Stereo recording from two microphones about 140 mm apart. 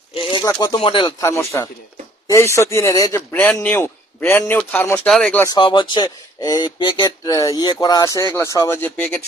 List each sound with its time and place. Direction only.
0.1 s a sound: 35° left (ahead or behind)
0.4 s speech: 25° left (ahead or behind)
0.8 s speech: 40° left (ahead or behind)
1.2 s speech: 20° left (ahead or behind)
5.0 s speech: 5° left (ahead or behind)
5.5 s speech: 35° left (ahead or behind); by 9.1 s 15° left (ahead or behind)